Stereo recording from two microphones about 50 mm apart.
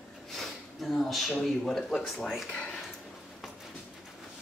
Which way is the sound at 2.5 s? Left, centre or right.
Left.